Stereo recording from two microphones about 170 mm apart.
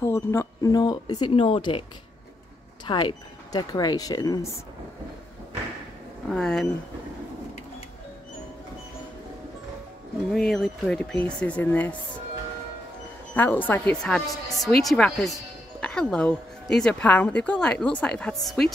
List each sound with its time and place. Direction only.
0.0 s speech: 15° left (ahead or behind); by 1.9 s 30° left (ahead or behind)
2.9 s speech: 25° left (ahead or behind)
6.2 s speech: 5° left (ahead or behind)
10.3 s speech: centre (ahead or behind)
13.3 s speech: 10° left (ahead or behind)